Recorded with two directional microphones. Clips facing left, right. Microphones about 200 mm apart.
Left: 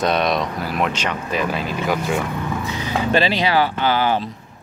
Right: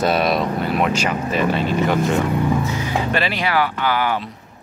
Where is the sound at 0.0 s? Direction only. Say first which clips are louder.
Right 1 dB; 5° right (ahead or behind).